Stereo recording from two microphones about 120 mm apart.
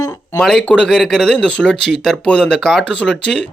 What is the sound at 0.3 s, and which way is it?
Speech, 5° left (ahead or behind).